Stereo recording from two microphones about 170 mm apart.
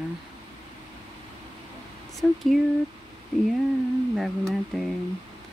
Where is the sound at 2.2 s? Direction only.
5° right (ahead or behind).